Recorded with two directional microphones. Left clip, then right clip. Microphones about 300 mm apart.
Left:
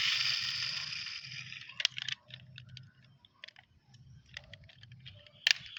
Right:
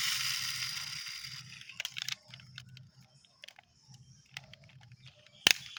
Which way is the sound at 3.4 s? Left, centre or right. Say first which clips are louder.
Left 1 dB; centre.